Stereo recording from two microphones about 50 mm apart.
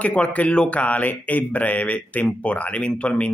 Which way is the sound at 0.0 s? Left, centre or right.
Left.